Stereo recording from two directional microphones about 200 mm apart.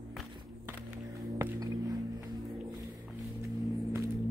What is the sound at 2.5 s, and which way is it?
Music, centre (ahead or behind).